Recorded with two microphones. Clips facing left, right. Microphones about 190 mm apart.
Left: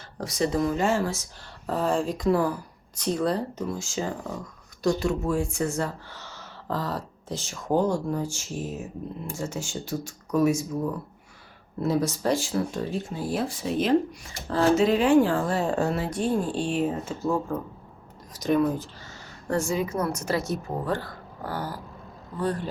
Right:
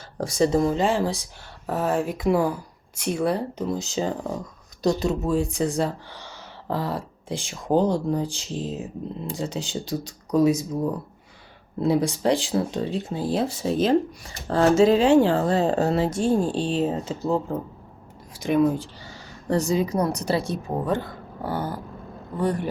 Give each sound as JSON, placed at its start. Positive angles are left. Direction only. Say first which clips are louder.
{"t": 0.2, "sound": "speech", "louder": "right 5 dB", "side_deg": -30}
{"t": 0.9, "sound": "speech", "louder": "right 2 dB", "side_deg": -15}
{"t": 3.8, "sound": "speech", "louder": "right 4 dB", "side_deg": -20}
{"t": 11.8, "sound": "speech", "louder": "right 3 dB", "side_deg": -15}
{"t": 15.7, "sound": "speech", "louder": "right 3 dB", "side_deg": -35}
{"t": 16.1, "sound": "speech", "louder": "right 4 dB", "side_deg": -25}
{"t": 19.9, "sound": "speech", "louder": "right 3 dB", "side_deg": -35}
{"t": 20.7, "sound": "speech", "louder": "right 4 dB", "side_deg": -20}